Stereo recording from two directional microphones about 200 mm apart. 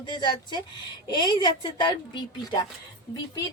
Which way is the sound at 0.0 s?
20° left (ahead or behind).